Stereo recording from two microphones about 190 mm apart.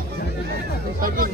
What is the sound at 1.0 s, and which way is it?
Speech, 50° right (ahead or behind).